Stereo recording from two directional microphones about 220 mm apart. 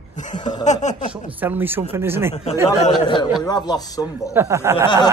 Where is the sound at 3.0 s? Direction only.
20° left (ahead or behind).